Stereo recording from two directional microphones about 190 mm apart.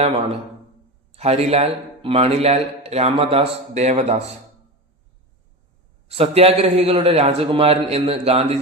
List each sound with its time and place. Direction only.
1.1 s a man's voice: 35° right (ahead or behind)
6.1 s a man's voice: 30° right (ahead or behind)